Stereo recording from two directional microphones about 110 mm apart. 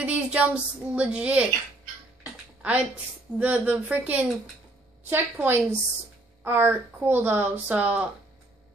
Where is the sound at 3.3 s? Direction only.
15° right (ahead or behind).